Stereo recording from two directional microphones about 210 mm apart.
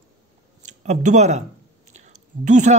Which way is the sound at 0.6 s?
35° right (ahead or behind).